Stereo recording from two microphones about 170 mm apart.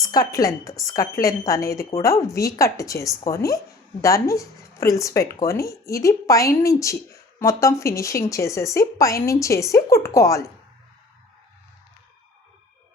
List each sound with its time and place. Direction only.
0.0 s a woman's voice: 20° left (ahead or behind)